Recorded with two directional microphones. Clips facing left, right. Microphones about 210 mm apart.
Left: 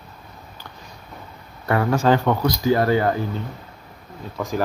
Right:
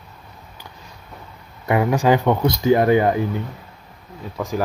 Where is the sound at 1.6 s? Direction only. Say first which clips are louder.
Right 1 dB; 15° right (ahead or behind).